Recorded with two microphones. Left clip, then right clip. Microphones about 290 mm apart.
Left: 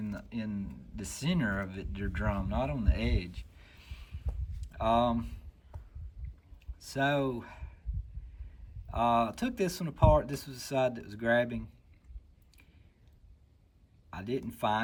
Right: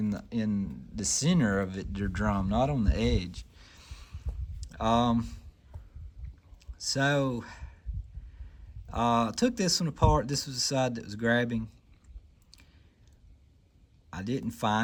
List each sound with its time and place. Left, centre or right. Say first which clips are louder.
0.0 s speech: right 6 dB; centre
6.6 s speech: right 3 dB; centre
8.9 s speech: right 1 dB; centre
14.1 s speech: right 1 dB; centre